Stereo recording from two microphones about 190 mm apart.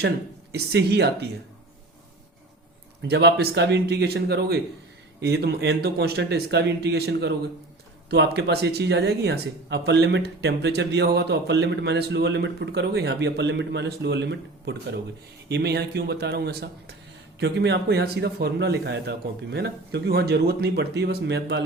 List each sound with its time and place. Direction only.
0.5 s speech: 60° right (ahead or behind)
3.1 s speech: 65° right (ahead or behind)